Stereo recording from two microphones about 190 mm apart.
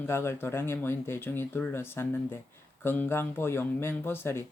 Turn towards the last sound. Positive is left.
turn(degrees=10)  # may be behind; listen again after turning